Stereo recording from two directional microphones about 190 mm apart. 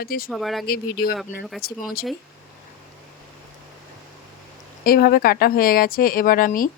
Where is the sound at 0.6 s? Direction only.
50° left (ahead or behind).